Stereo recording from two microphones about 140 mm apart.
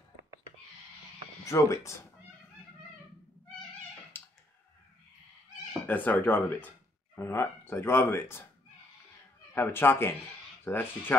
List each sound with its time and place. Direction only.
1.4 s speech: 20° left (ahead or behind)
4.1 s clicking: 15° left (ahead or behind)
5.9 s speech: 10° left (ahead or behind)
9.5 s speech: 15° left (ahead or behind)